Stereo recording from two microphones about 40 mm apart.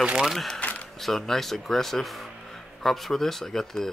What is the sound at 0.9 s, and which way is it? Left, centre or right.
Speech, centre.